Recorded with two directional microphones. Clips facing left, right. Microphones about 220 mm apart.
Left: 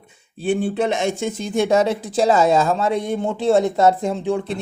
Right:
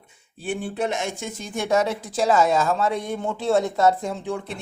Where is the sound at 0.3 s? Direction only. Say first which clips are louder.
Left 7 dB; 25° left (ahead or behind).